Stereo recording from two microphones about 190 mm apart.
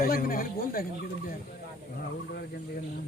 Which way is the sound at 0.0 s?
50° left (ahead or behind).